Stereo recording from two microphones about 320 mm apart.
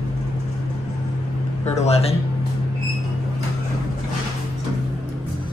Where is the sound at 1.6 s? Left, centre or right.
Centre.